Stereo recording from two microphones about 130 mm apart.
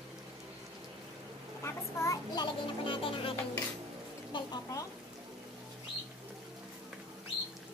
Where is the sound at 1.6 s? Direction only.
20° left (ahead or behind).